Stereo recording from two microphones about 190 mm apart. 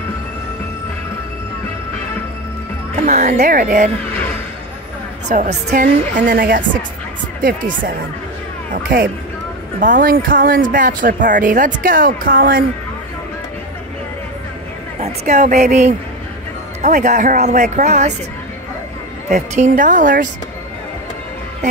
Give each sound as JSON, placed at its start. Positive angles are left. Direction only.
{"t": 3.1, "sound": "speech", "side_deg": -35}
{"t": 5.3, "sound": "speech", "side_deg": -45}
{"t": 15.0, "sound": "speech", "side_deg": -35}
{"t": 16.8, "sound": "speech", "side_deg": -40}
{"t": 19.2, "sound": "speech", "side_deg": -40}